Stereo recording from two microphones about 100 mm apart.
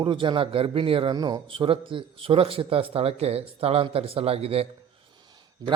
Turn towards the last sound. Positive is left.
turn(degrees=-40)  # may be behind; listen again after turning